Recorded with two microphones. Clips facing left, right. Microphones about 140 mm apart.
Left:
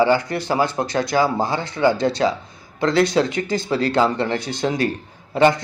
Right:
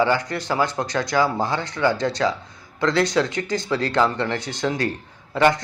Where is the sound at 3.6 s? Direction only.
10° left (ahead or behind).